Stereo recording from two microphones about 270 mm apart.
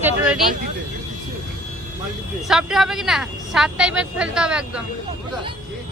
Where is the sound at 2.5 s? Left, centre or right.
Centre.